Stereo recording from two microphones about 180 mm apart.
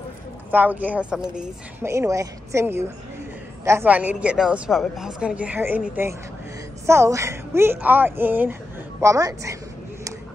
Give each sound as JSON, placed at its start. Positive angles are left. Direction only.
{"t": 0.5, "sound": "a woman's voice", "side_deg": -10}
{"t": 1.9, "sound": "a woman's voice", "side_deg": -15}